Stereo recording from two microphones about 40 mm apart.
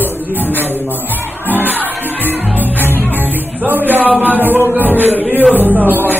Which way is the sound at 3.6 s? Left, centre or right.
Right.